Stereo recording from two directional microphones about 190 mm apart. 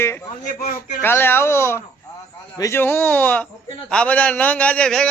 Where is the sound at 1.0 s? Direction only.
10° left (ahead or behind).